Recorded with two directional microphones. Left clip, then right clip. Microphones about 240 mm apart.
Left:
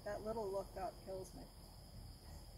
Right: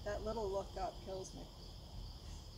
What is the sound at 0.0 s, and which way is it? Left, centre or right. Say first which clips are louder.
Cricket: right 2 dB; centre.